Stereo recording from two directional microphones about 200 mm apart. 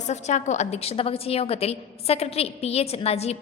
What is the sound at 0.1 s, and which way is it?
A woman's voice, 35° left (ahead or behind).